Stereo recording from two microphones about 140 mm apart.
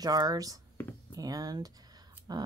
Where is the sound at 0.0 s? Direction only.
25° right (ahead or behind).